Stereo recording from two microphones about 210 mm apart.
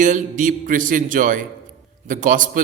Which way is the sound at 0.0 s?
40° right (ahead or behind).